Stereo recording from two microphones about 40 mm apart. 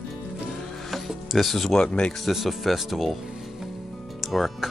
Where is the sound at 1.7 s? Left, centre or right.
Left.